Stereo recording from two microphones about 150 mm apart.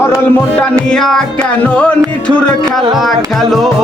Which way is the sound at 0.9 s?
5° left (ahead or behind).